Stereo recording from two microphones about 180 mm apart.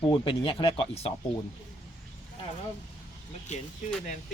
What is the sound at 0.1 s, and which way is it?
Speech, 30° left (ahead or behind).